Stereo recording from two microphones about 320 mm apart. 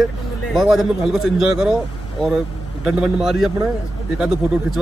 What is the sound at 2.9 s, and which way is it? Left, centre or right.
Speech, centre.